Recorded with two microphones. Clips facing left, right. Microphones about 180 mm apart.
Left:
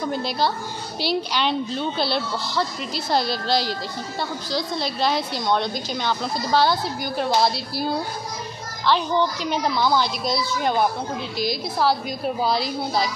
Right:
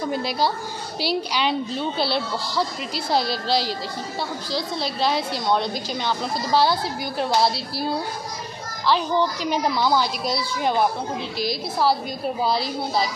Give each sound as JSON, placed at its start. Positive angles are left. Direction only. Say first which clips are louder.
{"t": 0.1, "sound": "a woman's voice", "louder": "right 2 dB", "side_deg": -10}
{"t": 2.3, "sound": "speech", "louder": "even", "side_deg": -35}
{"t": 3.1, "sound": "a woman's voice", "louder": "even", "side_deg": -5}
{"t": 8.8, "sound": "a woman's voice", "louder": "even", "side_deg": -5}